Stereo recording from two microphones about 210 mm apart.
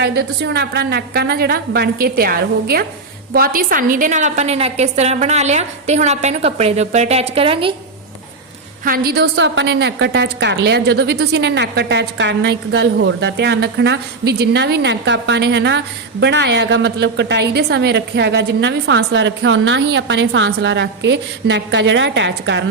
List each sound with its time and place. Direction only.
0.0 s a woman's voice: 55° right (ahead or behind); by 7.7 s 25° right (ahead or behind)
8.8 s a woman's voice: 45° right (ahead or behind)